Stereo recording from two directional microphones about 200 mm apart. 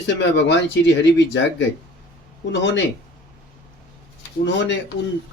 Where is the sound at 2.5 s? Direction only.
65° left (ahead or behind).